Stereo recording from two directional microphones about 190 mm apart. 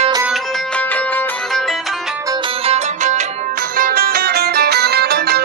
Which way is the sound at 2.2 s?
25° right (ahead or behind).